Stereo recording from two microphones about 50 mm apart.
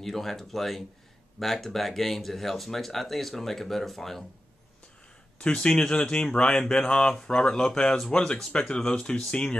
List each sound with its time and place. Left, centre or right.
0.0 s speech: centre
5.4 s speech: left